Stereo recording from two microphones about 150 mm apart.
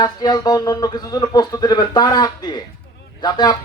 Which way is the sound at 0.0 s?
25° left (ahead or behind).